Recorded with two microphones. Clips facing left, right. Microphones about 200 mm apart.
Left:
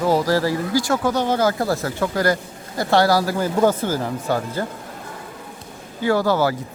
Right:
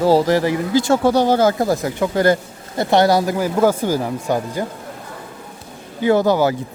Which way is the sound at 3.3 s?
10° right (ahead or behind).